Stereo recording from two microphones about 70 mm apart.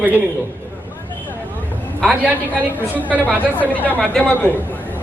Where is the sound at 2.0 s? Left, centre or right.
Right.